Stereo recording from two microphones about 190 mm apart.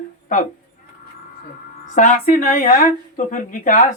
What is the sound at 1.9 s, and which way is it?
Speech, 40° left (ahead or behind).